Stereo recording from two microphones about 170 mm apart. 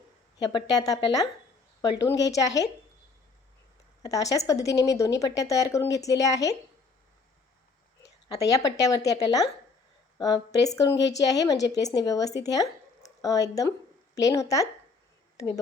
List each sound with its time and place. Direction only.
0.3 s a woman's voice: 25° left (ahead or behind)
4.0 s a woman's voice: 20° left (ahead or behind)
8.0 s a woman's voice: 20° left (ahead or behind)
10.9 s a woman's voice: 90° left
11.3 s a woman's voice: 20° left (ahead or behind)